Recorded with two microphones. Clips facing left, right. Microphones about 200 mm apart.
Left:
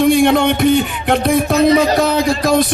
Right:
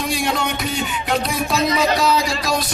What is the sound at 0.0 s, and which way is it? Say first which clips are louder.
Music: left 11 dB; 55° left (ahead or behind).